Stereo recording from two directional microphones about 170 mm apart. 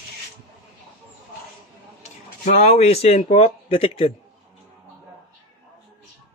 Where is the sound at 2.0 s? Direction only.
45° left (ahead or behind).